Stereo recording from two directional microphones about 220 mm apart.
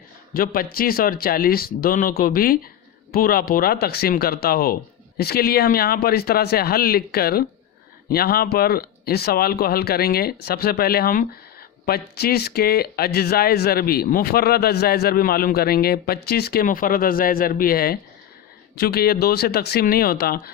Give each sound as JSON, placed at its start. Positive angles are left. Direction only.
{"t": 0.3, "sound": "speech", "side_deg": 40}